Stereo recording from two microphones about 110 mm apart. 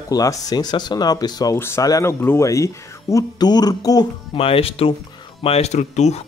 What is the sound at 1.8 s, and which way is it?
Speech, 35° left (ahead or behind).